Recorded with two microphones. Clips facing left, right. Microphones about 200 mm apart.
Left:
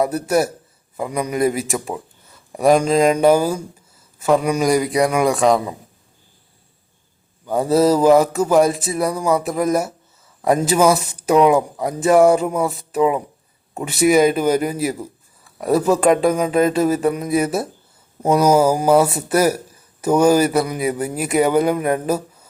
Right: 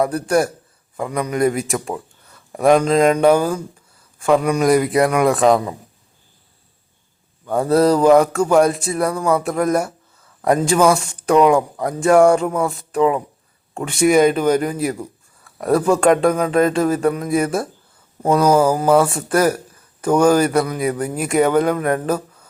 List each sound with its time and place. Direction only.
0.0 s speech: 5° left (ahead or behind)
7.7 s speech: 5° left (ahead or behind)